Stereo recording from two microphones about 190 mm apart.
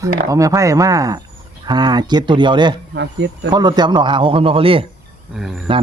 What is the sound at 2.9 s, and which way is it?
Speech, 65° right (ahead or behind).